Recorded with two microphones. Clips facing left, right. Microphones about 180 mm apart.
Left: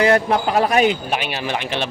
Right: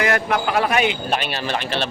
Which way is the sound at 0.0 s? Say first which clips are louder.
Left 4 dB; 30° left (ahead or behind).